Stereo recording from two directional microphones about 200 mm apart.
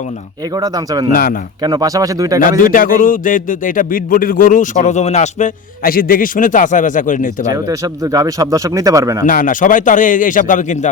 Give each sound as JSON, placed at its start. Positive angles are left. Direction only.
{"t": 0.5, "sound": "speech", "side_deg": -20}
{"t": 1.1, "sound": "speech", "side_deg": 45}
{"t": 1.6, "sound": "speech", "side_deg": -20}
{"t": 2.4, "sound": "a man's voice", "side_deg": 45}
{"t": 7.5, "sound": "speech", "side_deg": -15}
{"t": 9.2, "sound": "a man's voice", "side_deg": 40}